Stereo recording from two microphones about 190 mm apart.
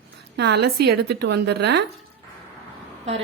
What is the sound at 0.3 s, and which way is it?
A woman's voice, 60° right (ahead or behind).